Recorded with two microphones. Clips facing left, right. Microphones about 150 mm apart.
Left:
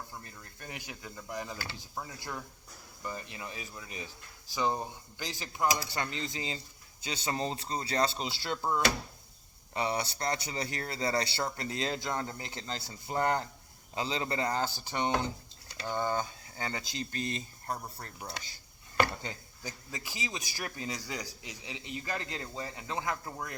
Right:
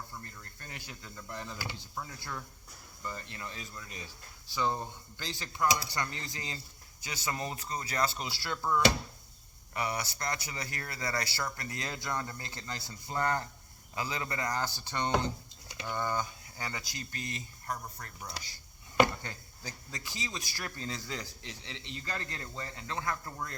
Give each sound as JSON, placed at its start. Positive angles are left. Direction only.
{"t": 0.1, "sound": "a man's voice", "side_deg": 15}
{"t": 19.2, "sound": "a man's voice", "side_deg": 15}